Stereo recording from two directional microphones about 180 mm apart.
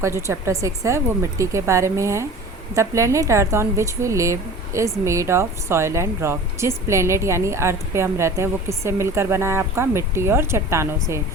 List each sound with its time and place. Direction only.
0.0 s speech: 15° right (ahead or behind)